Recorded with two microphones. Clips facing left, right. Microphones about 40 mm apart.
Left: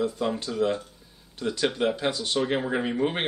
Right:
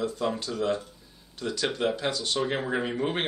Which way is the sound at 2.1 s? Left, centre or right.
Left.